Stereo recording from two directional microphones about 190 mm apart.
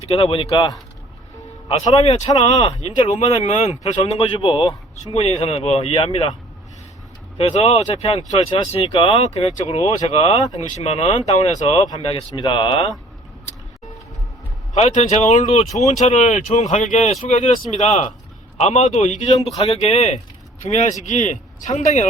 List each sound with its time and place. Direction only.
0.1 s speech: 30° left (ahead or behind)
7.3 s speech: 30° left (ahead or behind)
14.7 s speech: 40° left (ahead or behind)